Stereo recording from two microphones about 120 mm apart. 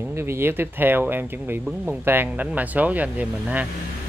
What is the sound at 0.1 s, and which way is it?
Speech, 20° right (ahead or behind).